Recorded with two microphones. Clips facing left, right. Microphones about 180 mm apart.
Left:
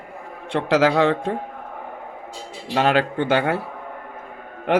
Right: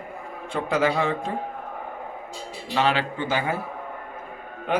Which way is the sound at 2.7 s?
50° left (ahead or behind).